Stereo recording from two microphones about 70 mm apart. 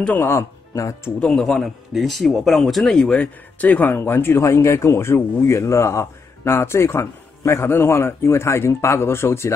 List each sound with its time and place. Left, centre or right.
0.2 s speech: left
1.2 s speech: centre
3.2 s speech: left